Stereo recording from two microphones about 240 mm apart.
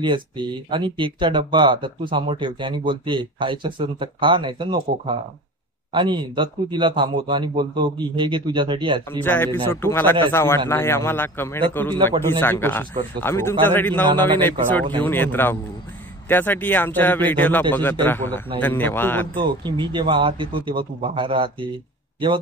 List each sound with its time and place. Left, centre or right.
0.7 s speech: centre
9.1 s speech: centre
19.6 s speech: centre